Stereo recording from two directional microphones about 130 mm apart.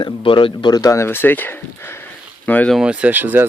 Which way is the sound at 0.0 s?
40° left (ahead or behind).